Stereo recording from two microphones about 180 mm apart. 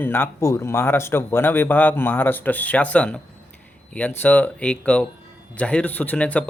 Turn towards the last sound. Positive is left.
turn(degrees=5)  # may be behind; listen again after turning